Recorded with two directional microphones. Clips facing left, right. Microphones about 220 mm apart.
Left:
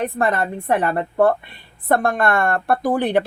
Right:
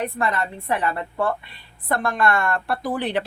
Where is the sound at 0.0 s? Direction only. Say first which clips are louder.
Left 4 dB; 50° left (ahead or behind).